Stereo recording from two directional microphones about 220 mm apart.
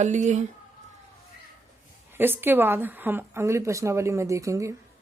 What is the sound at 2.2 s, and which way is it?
Speech, 10° right (ahead or behind).